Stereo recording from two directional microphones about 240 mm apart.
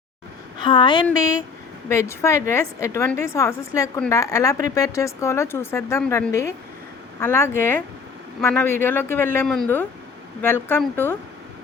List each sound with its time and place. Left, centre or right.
0.6 s a woman's voice: centre